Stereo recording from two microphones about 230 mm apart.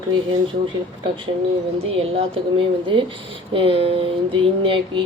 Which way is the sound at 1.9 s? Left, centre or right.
Right.